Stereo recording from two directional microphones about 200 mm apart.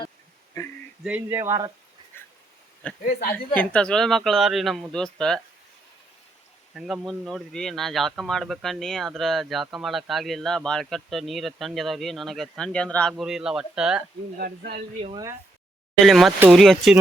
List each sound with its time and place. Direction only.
1.0 s speech: 10° right (ahead or behind)
2.1 s dog: 10° left (ahead or behind)
2.8 s speech: 5° left (ahead or behind)
6.7 s speech: centre (ahead or behind)
14.3 s speech: 50° right (ahead or behind)
15.0 s speech: 20° right (ahead or behind)
16.0 s speech: centre (ahead or behind)